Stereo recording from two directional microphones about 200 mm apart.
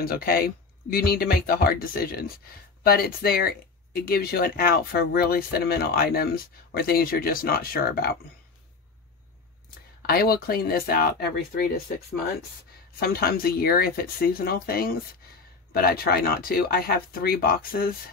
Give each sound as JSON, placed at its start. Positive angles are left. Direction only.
{"t": 0.0, "sound": "speech", "side_deg": 50}
{"t": 10.0, "sound": "speech", "side_deg": 50}
{"t": 13.0, "sound": "speech", "side_deg": 50}